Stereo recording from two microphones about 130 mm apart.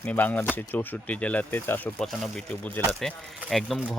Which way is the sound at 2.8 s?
15° left (ahead or behind).